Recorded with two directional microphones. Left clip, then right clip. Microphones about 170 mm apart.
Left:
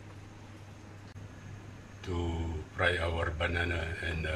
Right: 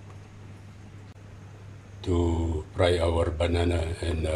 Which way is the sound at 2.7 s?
30° right (ahead or behind).